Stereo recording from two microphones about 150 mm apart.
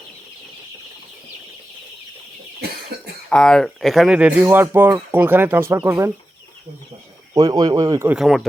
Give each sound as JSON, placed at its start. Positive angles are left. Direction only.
{"t": 3.2, "sound": "speech", "side_deg": 5}
{"t": 7.3, "sound": "speech", "side_deg": -25}
{"t": 8.0, "sound": "speech", "side_deg": -5}